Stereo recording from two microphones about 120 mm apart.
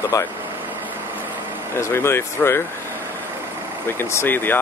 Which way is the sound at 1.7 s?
20° left (ahead or behind).